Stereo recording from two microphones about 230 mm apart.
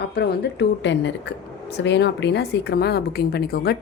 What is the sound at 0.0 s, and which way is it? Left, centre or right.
A woman's voice, left.